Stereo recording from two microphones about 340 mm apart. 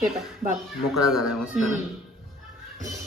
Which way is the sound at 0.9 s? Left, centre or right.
Centre.